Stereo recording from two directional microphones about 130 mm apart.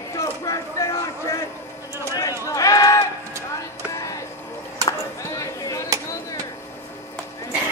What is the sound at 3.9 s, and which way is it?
Music, 25° left (ahead or behind).